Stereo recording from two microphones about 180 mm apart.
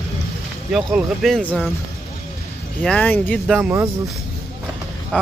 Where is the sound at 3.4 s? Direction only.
5° right (ahead or behind).